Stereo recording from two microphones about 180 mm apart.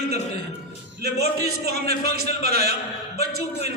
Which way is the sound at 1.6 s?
60° right (ahead or behind).